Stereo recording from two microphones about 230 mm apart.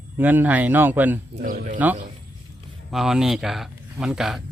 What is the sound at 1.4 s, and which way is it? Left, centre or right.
Speech, right.